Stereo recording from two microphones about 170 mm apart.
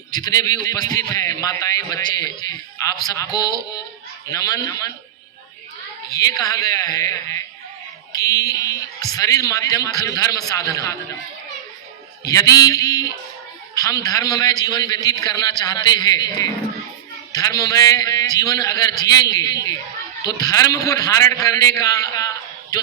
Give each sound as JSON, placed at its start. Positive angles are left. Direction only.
{"t": 0.3, "sound": "a man's voice", "side_deg": 20}
{"t": 6.1, "sound": "a man's voice", "side_deg": 20}
{"t": 12.3, "sound": "a man's voice", "side_deg": 20}